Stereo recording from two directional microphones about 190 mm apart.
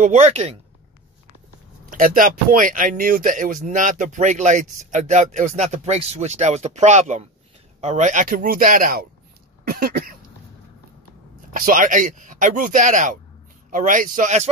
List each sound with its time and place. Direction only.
0.0 s speech: 35° right (ahead or behind)
1.9 s speech: 45° right (ahead or behind)
9.7 s cough: 50° right (ahead or behind)
11.5 s speech: 45° right (ahead or behind)